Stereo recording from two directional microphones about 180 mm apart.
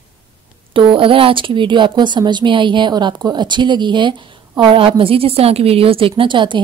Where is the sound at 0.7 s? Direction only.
30° right (ahead or behind).